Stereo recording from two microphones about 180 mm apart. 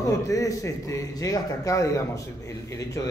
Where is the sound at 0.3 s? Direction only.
20° left (ahead or behind).